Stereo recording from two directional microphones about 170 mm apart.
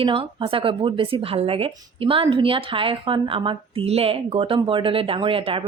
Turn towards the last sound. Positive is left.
turn(degrees=-35)  # may be behind; listen again after turning